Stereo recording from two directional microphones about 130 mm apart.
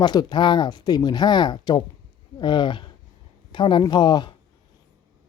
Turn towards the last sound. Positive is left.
turn(degrees=35)  # may be behind; listen again after turning